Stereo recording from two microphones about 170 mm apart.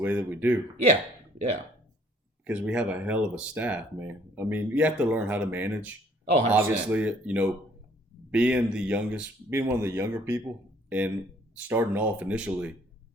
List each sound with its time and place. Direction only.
0.0 s speech: 10° right (ahead or behind)
2.4 s speech: 10° right (ahead or behind)